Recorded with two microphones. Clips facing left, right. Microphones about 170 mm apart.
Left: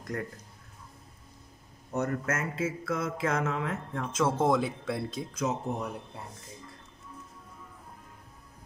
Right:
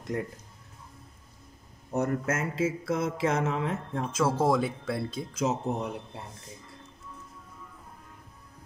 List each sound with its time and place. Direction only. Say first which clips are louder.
0.1 s mantra: right 3 dB; 20° right (ahead or behind)
1.9 s mantra: right 2 dB; 30° right (ahead or behind)
4.1 s speech: right 1 dB; centre (ahead or behind)
5.3 s mantra: right 3 dB; 25° right (ahead or behind)